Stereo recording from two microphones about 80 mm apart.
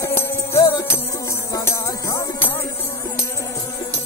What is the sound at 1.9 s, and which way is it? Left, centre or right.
Music, left.